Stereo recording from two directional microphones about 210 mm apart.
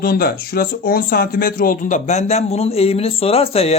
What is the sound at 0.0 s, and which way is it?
Speech, 45° left (ahead or behind).